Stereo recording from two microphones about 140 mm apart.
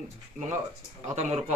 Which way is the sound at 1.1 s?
55° right (ahead or behind).